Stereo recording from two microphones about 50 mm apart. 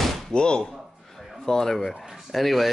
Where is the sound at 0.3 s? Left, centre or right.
Centre.